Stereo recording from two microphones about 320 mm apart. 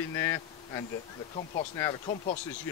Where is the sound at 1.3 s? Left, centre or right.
Left.